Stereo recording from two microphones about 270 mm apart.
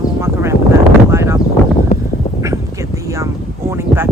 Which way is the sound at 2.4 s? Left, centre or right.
Centre.